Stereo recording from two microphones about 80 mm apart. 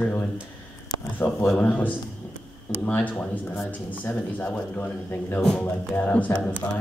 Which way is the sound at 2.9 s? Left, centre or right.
Centre.